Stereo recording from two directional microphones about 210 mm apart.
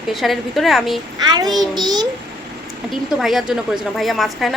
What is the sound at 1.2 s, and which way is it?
Speech, 20° right (ahead or behind).